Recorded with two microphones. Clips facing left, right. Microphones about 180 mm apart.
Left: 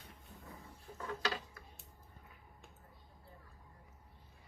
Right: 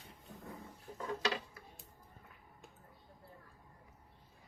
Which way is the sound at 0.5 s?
20° right (ahead or behind).